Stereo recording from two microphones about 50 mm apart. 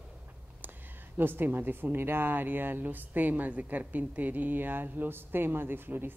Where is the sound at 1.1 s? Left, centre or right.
Right.